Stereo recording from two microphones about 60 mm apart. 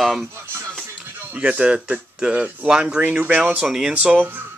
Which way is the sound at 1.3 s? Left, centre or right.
Centre.